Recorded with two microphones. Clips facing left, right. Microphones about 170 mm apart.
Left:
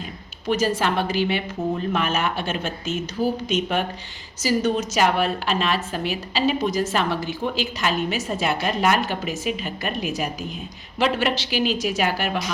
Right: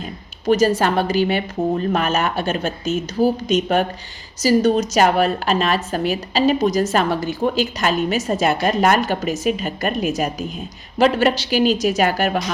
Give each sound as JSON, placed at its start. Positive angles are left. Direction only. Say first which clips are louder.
{"t": 0.4, "sound": "a woman's voice", "louder": "right 6 dB", "side_deg": -40}